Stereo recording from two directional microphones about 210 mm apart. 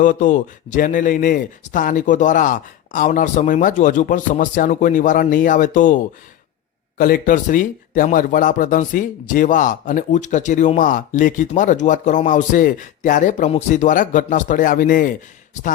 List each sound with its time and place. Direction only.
0.0 s speech: 40° left (ahead or behind)
7.0 s speech: 45° left (ahead or behind)